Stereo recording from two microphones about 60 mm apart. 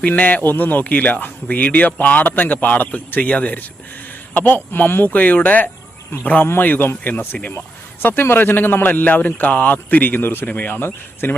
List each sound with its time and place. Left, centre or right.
0.1 s a man's voice: left